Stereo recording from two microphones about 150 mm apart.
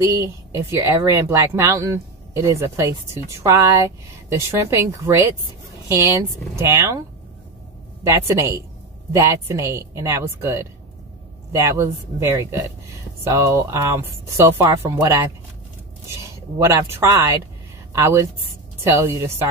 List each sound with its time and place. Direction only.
0.0 s speech: 20° right (ahead or behind)
8.0 s speech: 20° right (ahead or behind)
16.5 s speech: 20° right (ahead or behind)